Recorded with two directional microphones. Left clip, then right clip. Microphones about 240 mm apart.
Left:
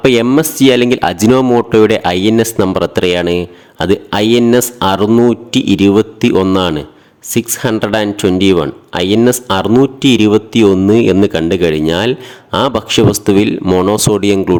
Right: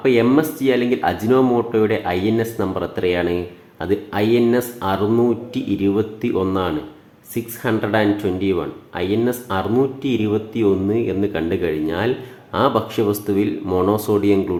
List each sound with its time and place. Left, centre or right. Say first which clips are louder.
0.0 s speech: left 6 dB; left